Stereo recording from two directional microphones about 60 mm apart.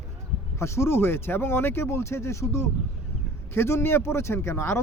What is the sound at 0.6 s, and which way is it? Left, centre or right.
Speech, left.